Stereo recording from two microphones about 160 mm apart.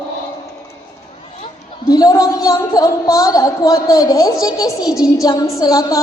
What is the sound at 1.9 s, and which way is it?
A woman's voice, 25° left (ahead or behind).